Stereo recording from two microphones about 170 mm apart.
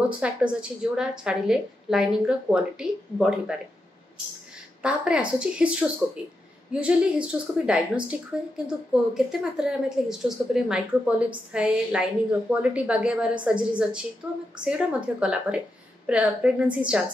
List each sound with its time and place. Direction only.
0.2 s a woman's voice: 5° right (ahead or behind)
4.8 s a woman's voice: 5° right (ahead or behind)